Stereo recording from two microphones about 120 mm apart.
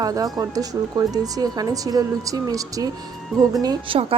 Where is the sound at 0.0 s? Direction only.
30° right (ahead or behind).